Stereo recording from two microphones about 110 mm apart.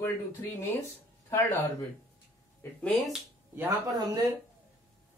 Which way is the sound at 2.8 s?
Centre (ahead or behind).